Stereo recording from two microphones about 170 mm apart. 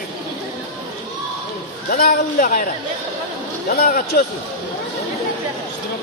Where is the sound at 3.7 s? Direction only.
65° left (ahead or behind).